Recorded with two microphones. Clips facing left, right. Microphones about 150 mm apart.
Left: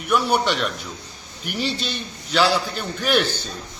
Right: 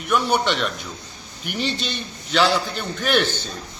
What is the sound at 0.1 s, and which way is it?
A man's voice, 5° left (ahead or behind).